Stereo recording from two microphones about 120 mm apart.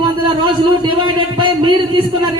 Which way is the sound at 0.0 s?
40° right (ahead or behind).